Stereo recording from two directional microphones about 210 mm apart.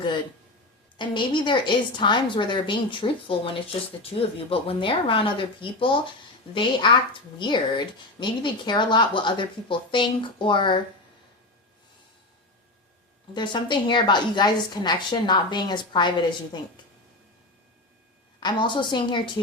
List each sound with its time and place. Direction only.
0.9 s a woman's voice: 20° left (ahead or behind)
13.3 s a woman's voice: 20° left (ahead or behind)
18.3 s a woman's voice: 20° left (ahead or behind)